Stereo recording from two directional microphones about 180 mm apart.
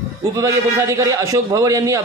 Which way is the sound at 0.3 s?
20° right (ahead or behind).